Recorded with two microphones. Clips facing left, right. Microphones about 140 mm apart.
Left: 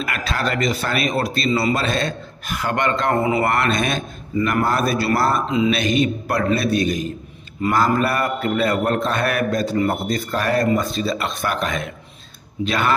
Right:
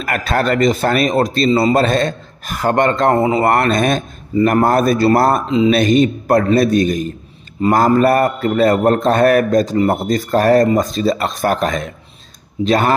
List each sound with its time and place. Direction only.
0.0 s speech: 50° right (ahead or behind); by 3.4 s 30° right (ahead or behind)
3.4 s speech: 45° right (ahead or behind)
7.6 s speech: 30° right (ahead or behind)
7.9 s speech: 40° right (ahead or behind)